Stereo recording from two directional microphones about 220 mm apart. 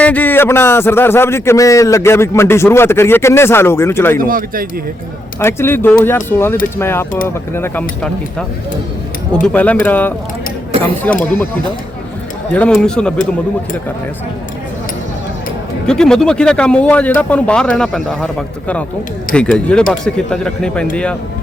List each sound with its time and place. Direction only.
0.0 s speech: 5° left (ahead or behind)
4.2 s speech: 40° right (ahead or behind)
5.4 s speech: 10° left (ahead or behind)
12.5 s speech: 5° left (ahead or behind)
15.9 s speech: 5° left (ahead or behind)